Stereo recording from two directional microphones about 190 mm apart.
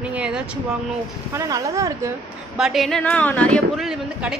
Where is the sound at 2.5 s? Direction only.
Centre (ahead or behind).